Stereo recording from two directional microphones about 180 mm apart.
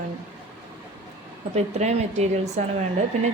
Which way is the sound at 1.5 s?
35° right (ahead or behind).